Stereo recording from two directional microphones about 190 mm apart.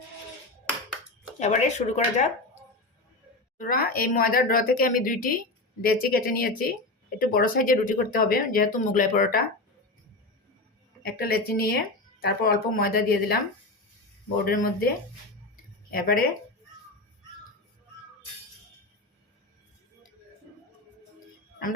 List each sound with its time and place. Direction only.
1.4 s speech: 35° left (ahead or behind)
3.6 s speech: 50° left (ahead or behind)
11.0 s speech: 55° left (ahead or behind)
14.4 s speech: 50° left (ahead or behind)
15.9 s speech: 50° left (ahead or behind)